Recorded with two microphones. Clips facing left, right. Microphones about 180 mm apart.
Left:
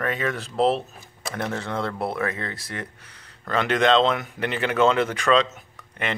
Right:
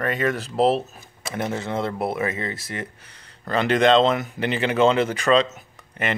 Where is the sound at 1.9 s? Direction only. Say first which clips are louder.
Right 2 dB; 5° right (ahead or behind).